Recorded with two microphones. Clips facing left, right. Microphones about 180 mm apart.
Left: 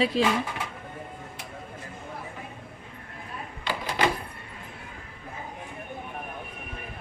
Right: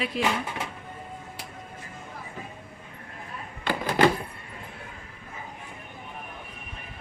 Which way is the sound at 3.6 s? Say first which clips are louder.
Right 5 dB; 50° right (ahead or behind).